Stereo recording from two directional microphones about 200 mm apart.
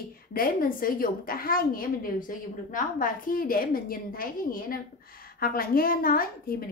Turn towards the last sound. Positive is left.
turn(degrees=45)  # may be behind; listen again after turning